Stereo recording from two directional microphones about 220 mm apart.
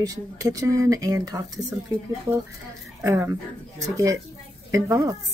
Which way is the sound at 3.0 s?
15° right (ahead or behind).